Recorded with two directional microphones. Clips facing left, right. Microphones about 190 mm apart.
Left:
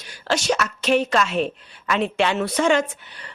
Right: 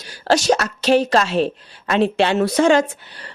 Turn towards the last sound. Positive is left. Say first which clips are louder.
# right 4 dB
turn(degrees=-35)  # may be behind; listen again after turning